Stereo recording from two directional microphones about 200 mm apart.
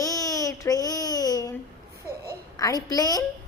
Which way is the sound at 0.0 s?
15° left (ahead or behind).